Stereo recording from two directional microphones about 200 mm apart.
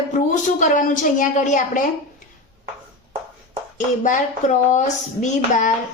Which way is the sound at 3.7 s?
40° left (ahead or behind).